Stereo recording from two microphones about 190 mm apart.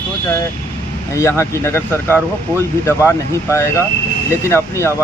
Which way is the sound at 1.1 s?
15° left (ahead or behind).